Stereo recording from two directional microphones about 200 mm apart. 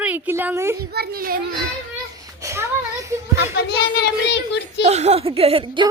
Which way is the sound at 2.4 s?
15° right (ahead or behind).